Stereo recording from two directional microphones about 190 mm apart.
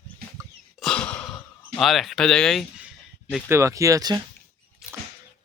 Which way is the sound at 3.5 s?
15° right (ahead or behind).